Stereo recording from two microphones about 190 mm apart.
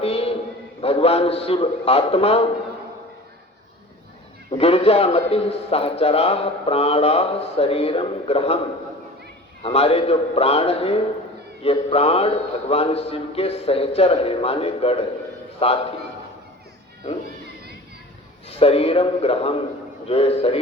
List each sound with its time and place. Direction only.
0.0 s a sound: 30° left (ahead or behind)
0.8 s a man's voice: 30° left (ahead or behind)
4.5 s a man's voice: 30° left (ahead or behind)
9.6 s a man's voice: 30° left (ahead or behind)
18.4 s a man's voice: 30° left (ahead or behind)